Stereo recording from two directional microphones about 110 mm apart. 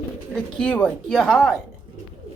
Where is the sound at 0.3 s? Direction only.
10° left (ahead or behind).